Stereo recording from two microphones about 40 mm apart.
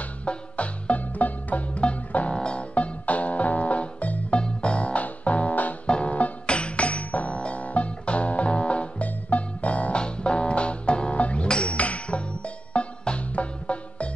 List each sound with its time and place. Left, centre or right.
0.0 s music: left
5.9 s music: left
11.4 s music: left
11.7 s music: left